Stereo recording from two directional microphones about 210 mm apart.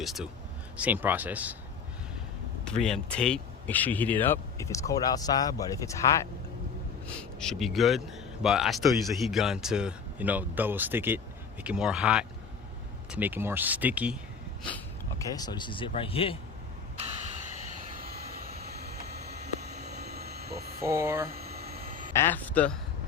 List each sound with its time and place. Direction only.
0.0 s speech: centre (ahead or behind)
2.6 s speech: 5° left (ahead or behind)
7.2 s speech: 5° left (ahead or behind)
15.2 s speech: 15° left (ahead or behind)
18.0 s vehicle: 45° right (ahead or behind)
20.8 s speech: 15° right (ahead or behind)
21.2 s a sound: 45° right (ahead or behind)
22.1 s speech: 10° left (ahead or behind)